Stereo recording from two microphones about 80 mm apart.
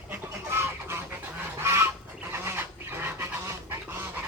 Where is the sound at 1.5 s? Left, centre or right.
Right.